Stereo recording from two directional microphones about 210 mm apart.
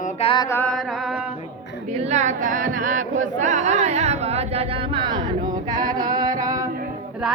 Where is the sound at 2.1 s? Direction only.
35° right (ahead or behind).